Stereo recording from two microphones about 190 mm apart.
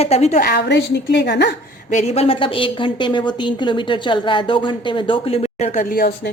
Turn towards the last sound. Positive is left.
turn(degrees=55)  # may be behind; listen again after turning